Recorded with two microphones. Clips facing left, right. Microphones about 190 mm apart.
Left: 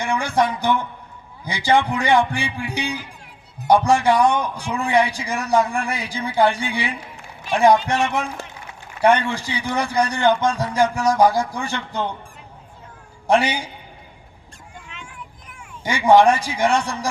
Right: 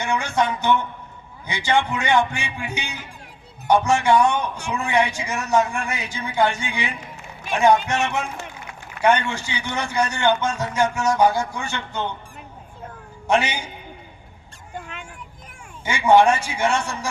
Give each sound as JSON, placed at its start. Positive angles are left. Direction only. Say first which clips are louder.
{"t": 0.0, "sound": "a man's voice", "louder": "left 2 dB", "side_deg": 35}
{"t": 13.2, "sound": "a man's voice", "louder": "left 3 dB", "side_deg": 35}
{"t": 15.8, "sound": "a man's voice", "louder": "left 2 dB", "side_deg": 35}